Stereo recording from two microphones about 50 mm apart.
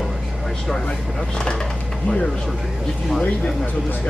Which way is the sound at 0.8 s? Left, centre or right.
Left.